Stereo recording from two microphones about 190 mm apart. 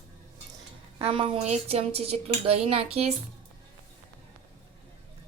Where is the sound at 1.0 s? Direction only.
30° right (ahead or behind).